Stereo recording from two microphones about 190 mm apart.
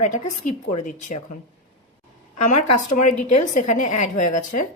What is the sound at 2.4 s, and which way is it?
A woman's voice, 40° left (ahead or behind).